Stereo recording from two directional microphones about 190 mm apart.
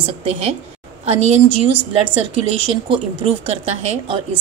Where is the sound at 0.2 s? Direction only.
30° right (ahead or behind).